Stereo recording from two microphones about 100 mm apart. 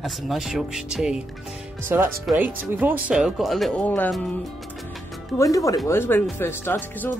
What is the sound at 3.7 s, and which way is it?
Speech, 15° left (ahead or behind).